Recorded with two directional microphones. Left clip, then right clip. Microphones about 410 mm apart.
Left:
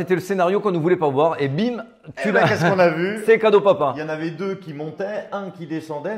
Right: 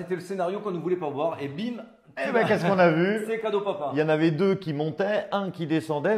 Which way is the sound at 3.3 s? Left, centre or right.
Left.